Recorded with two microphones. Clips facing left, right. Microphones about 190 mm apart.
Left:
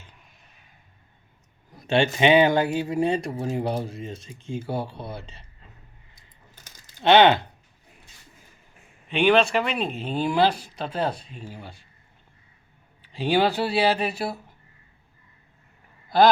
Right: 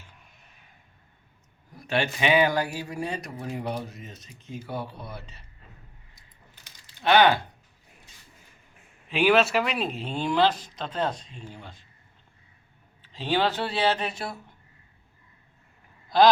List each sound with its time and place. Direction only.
1.8 s a man's voice: 25° left (ahead or behind)
6.7 s a sound: 45° left (ahead or behind)
7.0 s speech: 25° left (ahead or behind)
9.0 s speech: 5° right (ahead or behind)
13.0 s speech: 10° left (ahead or behind)
16.0 s speech: 5° left (ahead or behind)